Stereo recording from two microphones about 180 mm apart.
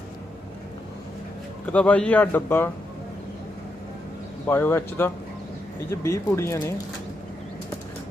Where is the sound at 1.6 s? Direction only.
10° left (ahead or behind).